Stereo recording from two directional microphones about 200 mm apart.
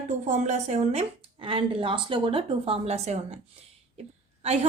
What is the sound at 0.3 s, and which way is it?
A woman's voice, 35° right (ahead or behind).